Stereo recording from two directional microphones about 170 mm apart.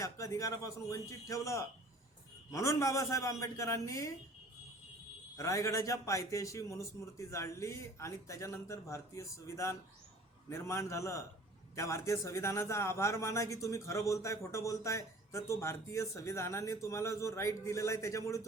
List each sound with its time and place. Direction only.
0.0 s a man's voice: 20° left (ahead or behind)
5.4 s a man's voice: 20° left (ahead or behind)